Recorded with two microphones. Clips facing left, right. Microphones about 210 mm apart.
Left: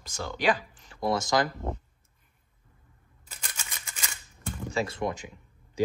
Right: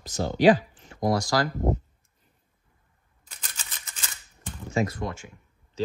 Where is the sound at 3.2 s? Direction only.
10° left (ahead or behind).